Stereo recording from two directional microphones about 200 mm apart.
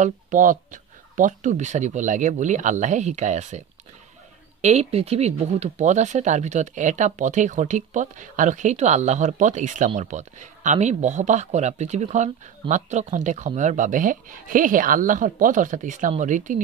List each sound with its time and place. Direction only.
0.0 s speech: 40° right (ahead or behind)